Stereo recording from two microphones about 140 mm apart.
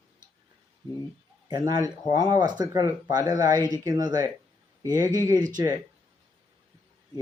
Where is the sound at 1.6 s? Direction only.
30° right (ahead or behind).